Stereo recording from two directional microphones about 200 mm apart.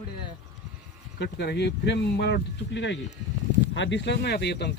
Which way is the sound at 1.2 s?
55° left (ahead or behind).